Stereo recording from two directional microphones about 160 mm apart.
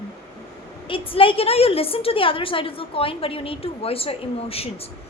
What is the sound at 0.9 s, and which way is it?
A woman's voice, 35° left (ahead or behind).